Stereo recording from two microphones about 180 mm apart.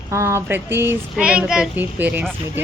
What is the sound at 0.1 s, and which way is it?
Speech, 15° right (ahead or behind).